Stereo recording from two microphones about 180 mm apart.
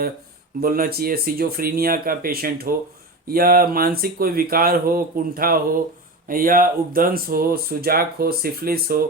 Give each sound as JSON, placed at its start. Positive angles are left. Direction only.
{"t": 0.6, "sound": "speech", "side_deg": -55}